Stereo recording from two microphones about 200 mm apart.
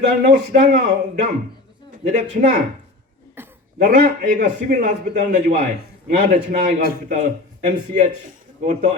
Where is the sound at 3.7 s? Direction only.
50° right (ahead or behind).